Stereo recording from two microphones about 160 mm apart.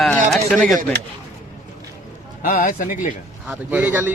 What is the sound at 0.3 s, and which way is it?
Speech, 5° left (ahead or behind).